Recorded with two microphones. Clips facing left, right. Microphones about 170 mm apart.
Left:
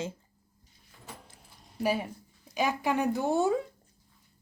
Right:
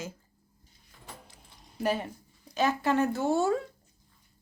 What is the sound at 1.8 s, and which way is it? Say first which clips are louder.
Speech: even; 10° left (ahead or behind).